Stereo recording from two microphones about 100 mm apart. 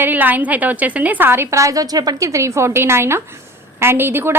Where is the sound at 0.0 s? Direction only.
20° right (ahead or behind).